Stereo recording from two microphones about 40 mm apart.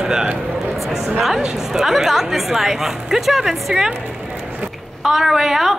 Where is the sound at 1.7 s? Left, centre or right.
Centre.